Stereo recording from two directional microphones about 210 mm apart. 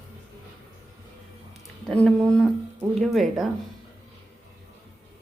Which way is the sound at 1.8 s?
5° left (ahead or behind).